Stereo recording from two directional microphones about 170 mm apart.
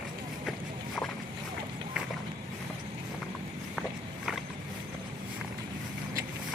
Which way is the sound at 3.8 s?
Centre (ahead or behind).